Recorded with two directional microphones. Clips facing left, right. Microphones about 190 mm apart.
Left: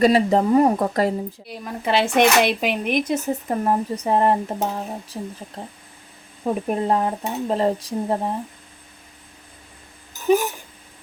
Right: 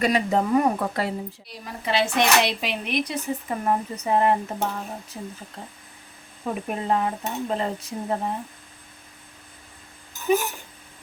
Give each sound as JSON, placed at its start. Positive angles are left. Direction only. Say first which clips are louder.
{"t": 0.0, "sound": "speech", "louder": "left 6 dB", "side_deg": 35}
{"t": 1.5, "sound": "speech", "louder": "left 5 dB", "side_deg": 55}
{"t": 6.4, "sound": "speech", "louder": "left 6 dB", "side_deg": 35}